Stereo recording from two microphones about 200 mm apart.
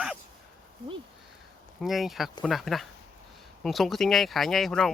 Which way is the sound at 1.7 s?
Centre (ahead or behind).